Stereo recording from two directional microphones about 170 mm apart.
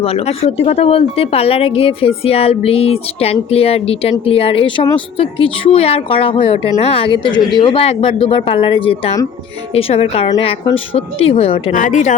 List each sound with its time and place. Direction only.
0.0 s speech: 35° left (ahead or behind)
11.7 s speech: 50° left (ahead or behind)